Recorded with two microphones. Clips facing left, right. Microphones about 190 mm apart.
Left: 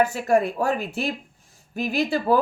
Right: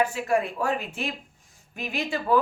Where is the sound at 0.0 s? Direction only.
40° left (ahead or behind).